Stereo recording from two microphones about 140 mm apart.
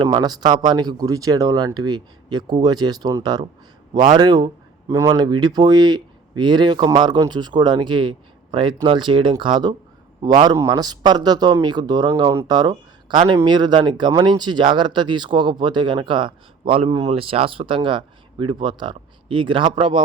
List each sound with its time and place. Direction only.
0.0 s speech: 30° right (ahead or behind)